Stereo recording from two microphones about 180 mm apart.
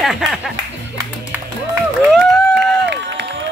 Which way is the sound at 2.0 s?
Centre (ahead or behind).